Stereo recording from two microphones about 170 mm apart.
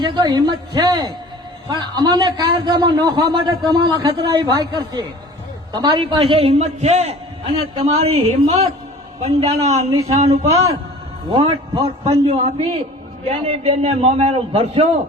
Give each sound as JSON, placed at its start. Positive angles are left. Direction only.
{"t": 0.0, "sound": "a man's voice", "side_deg": -25}